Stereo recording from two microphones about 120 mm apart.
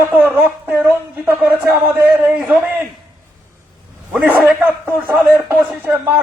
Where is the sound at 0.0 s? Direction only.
15° right (ahead or behind).